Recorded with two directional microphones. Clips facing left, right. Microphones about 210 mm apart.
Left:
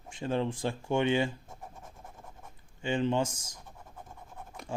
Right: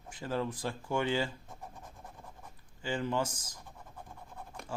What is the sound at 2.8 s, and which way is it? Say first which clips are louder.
Speech: left 4 dB; 25° left (ahead or behind).